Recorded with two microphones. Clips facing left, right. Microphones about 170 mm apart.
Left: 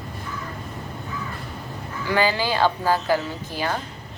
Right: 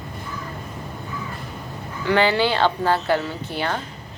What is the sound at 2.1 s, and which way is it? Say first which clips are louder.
Speech: right 3 dB; 65° right (ahead or behind).